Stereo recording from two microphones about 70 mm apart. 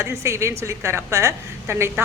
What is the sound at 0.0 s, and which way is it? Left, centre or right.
A woman's voice, right.